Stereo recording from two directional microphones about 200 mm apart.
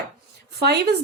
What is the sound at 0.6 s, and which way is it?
Speech, 55° right (ahead or behind).